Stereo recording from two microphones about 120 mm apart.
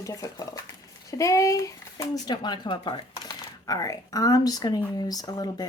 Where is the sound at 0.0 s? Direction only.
30° left (ahead or behind).